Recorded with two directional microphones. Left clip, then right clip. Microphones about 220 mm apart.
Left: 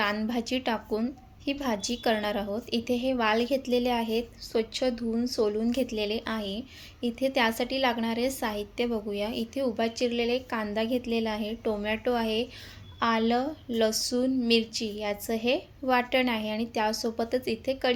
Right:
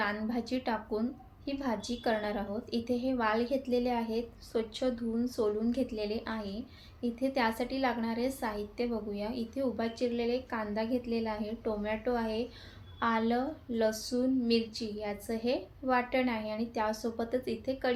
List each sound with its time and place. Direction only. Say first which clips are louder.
0.0 s a woman's voice: left 5 dB; 35° left (ahead or behind)